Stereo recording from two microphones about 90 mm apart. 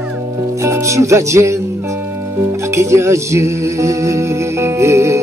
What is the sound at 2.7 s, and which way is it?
Music, 30° right (ahead or behind).